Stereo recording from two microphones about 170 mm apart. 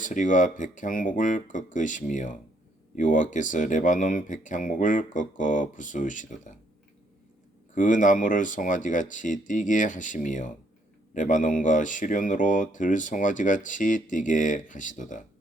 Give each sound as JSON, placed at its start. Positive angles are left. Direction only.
{"t": 0.0, "sound": "speech", "side_deg": 50}
{"t": 7.8, "sound": "speech", "side_deg": 50}